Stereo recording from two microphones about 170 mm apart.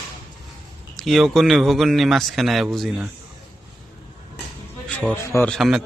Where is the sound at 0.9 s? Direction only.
Centre (ahead or behind).